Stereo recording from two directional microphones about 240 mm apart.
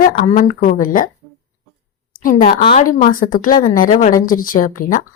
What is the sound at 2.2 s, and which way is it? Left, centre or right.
A woman's voice, left.